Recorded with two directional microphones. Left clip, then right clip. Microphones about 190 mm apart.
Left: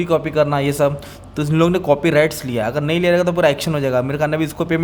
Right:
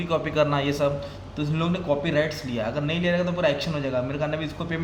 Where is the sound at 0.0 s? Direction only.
40° left (ahead or behind).